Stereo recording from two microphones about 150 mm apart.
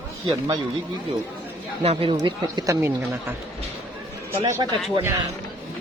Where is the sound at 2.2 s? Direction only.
25° right (ahead or behind).